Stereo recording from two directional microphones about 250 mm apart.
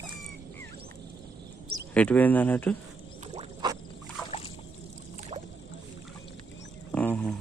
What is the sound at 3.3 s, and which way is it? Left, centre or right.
Frog, centre.